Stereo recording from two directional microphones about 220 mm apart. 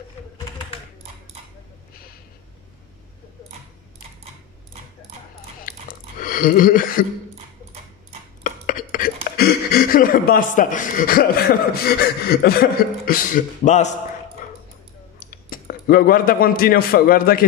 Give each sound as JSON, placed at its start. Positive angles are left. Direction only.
{"t": 5.6, "sound": "a sound", "side_deg": 40}
{"t": 8.5, "sound": "speech", "side_deg": 40}
{"t": 15.1, "sound": "speech", "side_deg": 40}